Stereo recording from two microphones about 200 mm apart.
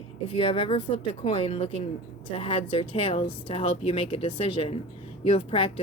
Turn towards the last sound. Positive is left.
turn(degrees=25)  # may be behind; listen again after turning